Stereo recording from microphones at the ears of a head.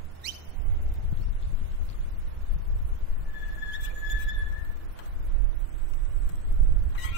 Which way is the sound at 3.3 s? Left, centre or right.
Left.